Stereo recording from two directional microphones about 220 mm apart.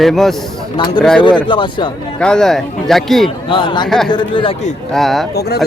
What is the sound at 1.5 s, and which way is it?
Speech, 20° left (ahead or behind).